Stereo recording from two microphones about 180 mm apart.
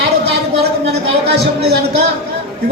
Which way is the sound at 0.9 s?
65° right (ahead or behind).